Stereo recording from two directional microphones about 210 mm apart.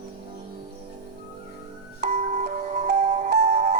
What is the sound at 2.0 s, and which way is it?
Music, 35° right (ahead or behind).